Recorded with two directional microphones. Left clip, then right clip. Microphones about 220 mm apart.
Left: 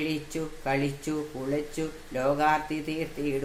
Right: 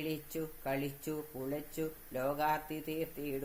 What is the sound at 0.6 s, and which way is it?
Speech, 45° right (ahead or behind).